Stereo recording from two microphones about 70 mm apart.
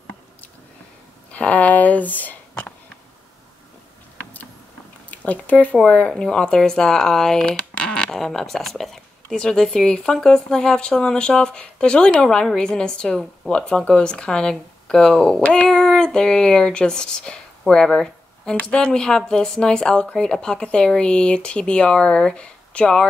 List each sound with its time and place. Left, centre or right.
1.3 s speech: left
5.1 s speech: left